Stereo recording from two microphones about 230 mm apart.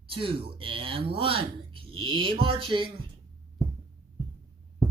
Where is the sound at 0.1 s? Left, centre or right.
Right.